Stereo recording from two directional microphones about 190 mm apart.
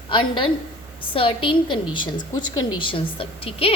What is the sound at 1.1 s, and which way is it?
A woman's voice, 30° left (ahead or behind).